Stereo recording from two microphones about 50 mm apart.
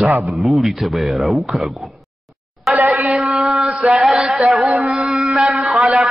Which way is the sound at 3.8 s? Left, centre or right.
Centre.